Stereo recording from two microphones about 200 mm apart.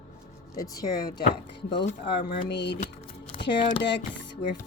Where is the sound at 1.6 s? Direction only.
25° left (ahead or behind).